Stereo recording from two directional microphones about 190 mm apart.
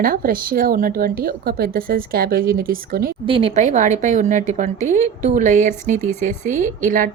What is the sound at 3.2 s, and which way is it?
A woman's voice, 30° right (ahead or behind).